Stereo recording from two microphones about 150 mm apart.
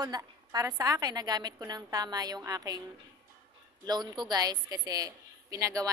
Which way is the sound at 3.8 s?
30° right (ahead or behind).